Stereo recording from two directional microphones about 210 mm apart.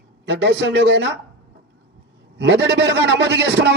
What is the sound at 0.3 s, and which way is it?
Speech, 55° right (ahead or behind).